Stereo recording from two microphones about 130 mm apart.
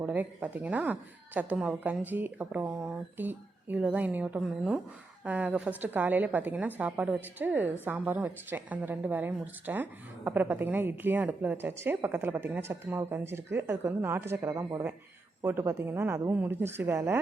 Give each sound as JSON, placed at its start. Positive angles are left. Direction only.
{"t": 0.0, "sound": "a woman's voice", "side_deg": -15}